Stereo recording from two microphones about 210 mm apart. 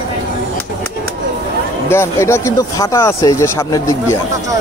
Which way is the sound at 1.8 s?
10° left (ahead or behind).